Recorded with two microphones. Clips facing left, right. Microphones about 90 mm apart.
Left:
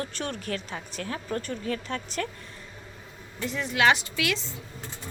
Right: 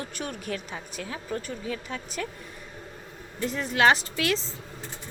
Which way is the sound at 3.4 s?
40° right (ahead or behind).